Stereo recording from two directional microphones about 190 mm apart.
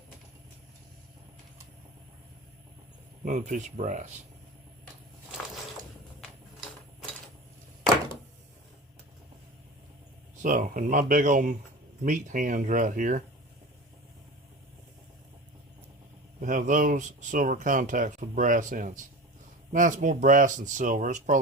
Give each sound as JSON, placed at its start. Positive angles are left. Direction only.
{"t": 3.2, "sound": "speech", "side_deg": -40}
{"t": 10.4, "sound": "speech", "side_deg": -40}
{"t": 16.4, "sound": "speech", "side_deg": -45}